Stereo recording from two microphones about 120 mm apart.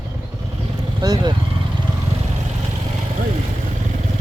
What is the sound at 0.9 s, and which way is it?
Speech, 35° right (ahead or behind).